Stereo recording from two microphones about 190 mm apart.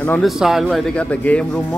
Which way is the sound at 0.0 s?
10° left (ahead or behind).